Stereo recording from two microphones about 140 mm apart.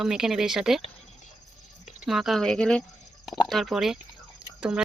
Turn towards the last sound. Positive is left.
turn(degrees=-5)  # may be behind; listen again after turning